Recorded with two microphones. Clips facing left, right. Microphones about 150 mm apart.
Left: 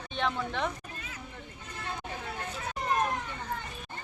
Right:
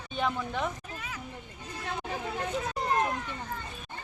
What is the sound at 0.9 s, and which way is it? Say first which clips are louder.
Children playing: right 4 dB; 90° right.